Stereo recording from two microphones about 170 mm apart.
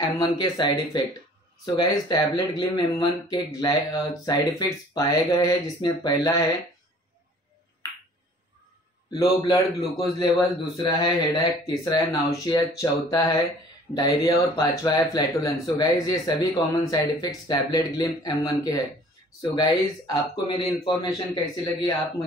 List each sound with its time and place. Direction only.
0.0 s speech: 25° left (ahead or behind)
9.1 s speech: 20° left (ahead or behind)